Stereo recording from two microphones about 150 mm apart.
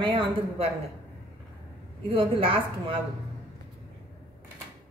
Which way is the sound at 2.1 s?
35° right (ahead or behind).